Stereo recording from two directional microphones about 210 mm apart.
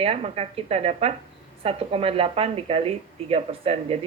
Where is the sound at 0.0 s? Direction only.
30° right (ahead or behind).